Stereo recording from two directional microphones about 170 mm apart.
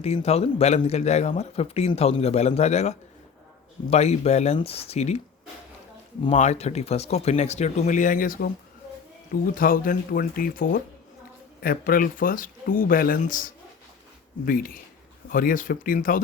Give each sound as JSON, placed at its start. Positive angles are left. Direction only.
{"t": 0.0, "sound": "a man's voice", "side_deg": 40}
{"t": 6.3, "sound": "a man's voice", "side_deg": 40}
{"t": 9.6, "sound": "speech", "side_deg": 55}